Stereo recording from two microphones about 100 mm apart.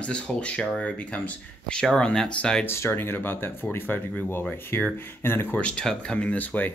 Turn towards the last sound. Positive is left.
turn(degrees=15)  # may be behind; listen again after turning